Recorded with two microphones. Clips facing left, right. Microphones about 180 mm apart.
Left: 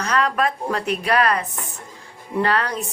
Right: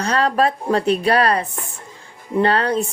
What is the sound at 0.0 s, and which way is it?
Speech, 30° right (ahead or behind).